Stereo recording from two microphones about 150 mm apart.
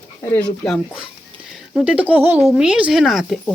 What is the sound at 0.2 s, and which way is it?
Speech, 15° left (ahead or behind).